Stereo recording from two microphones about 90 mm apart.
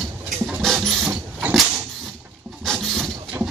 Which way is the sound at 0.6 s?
5° left (ahead or behind).